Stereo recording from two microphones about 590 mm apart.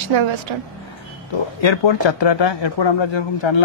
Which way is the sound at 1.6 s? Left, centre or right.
Left.